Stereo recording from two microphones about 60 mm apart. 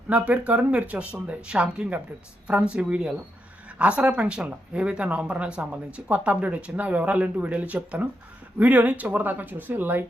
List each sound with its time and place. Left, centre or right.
0.1 s speech: right